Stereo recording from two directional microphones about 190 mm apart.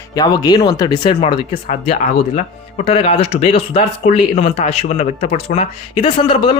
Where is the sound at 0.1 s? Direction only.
20° left (ahead or behind).